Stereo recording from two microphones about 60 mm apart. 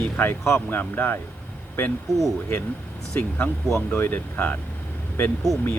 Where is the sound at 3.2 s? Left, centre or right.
Left.